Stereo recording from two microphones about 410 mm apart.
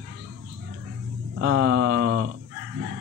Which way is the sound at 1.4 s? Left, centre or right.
Right.